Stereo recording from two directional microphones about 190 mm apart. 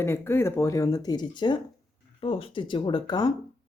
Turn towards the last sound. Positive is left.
turn(degrees=20)  # may be behind; listen again after turning